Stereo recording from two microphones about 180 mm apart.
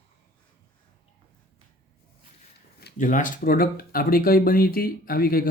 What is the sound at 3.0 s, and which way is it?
Speech, 45° left (ahead or behind).